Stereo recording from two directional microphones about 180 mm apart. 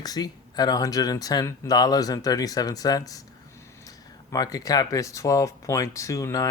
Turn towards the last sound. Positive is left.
turn(degrees=20)  # may be behind; listen again after turning